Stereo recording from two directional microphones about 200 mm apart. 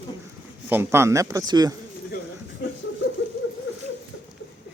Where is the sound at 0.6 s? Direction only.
10° right (ahead or behind).